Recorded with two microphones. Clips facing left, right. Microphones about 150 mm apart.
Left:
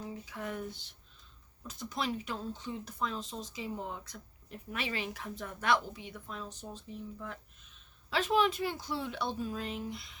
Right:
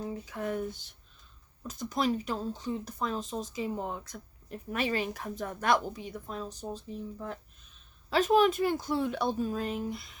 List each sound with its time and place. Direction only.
0.0 s speech: 45° right (ahead or behind)